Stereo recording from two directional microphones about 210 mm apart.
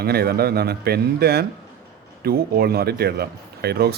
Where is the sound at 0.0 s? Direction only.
50° right (ahead or behind).